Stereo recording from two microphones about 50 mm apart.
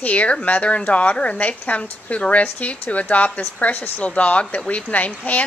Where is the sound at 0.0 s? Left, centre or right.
Left.